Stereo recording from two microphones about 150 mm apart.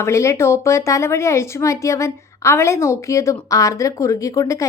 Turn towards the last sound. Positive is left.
turn(degrees=20)  # may be behind; listen again after turning